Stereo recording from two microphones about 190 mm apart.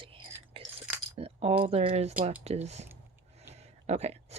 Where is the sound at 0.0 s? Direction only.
30° right (ahead or behind).